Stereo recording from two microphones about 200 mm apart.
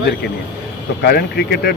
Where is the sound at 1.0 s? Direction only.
50° left (ahead or behind).